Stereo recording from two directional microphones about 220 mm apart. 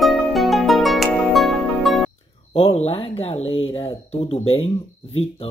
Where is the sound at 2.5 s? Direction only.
25° left (ahead or behind).